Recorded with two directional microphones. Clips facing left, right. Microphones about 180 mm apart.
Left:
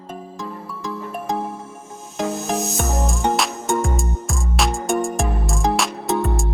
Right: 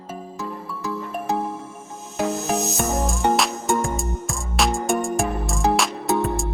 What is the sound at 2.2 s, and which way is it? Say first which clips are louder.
Music: even; centre (ahead or behind).